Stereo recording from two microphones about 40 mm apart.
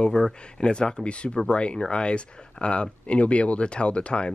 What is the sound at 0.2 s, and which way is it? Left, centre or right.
Speech, left.